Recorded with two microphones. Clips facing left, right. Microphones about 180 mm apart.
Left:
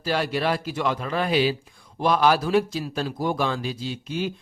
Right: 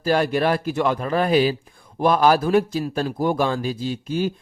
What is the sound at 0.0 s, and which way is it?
A man's voice, 50° right (ahead or behind).